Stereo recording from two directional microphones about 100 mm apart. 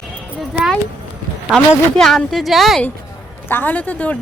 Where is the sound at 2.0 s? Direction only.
Centre (ahead or behind).